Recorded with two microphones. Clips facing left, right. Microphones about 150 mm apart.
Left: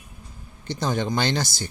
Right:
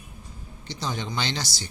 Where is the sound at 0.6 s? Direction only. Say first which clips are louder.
Left 7 dB; 50° left (ahead or behind).